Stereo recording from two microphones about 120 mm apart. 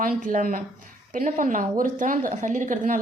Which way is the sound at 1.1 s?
90° right.